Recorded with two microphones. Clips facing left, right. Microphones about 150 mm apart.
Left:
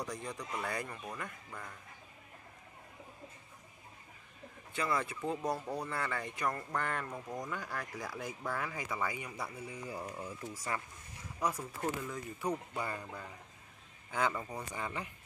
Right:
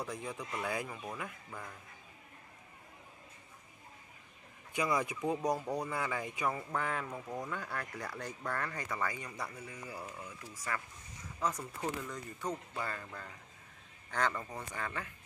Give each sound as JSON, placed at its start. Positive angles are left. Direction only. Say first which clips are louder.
{"t": 0.0, "sound": "speech", "louder": "even", "side_deg": -5}
{"t": 4.7, "sound": "speech", "louder": "right 2 dB", "side_deg": -15}
{"t": 11.3, "sound": "speech", "louder": "left 1 dB", "side_deg": 10}